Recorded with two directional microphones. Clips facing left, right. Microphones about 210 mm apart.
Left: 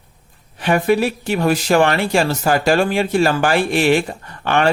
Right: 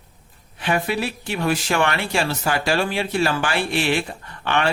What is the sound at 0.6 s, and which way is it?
Speech, 45° left (ahead or behind).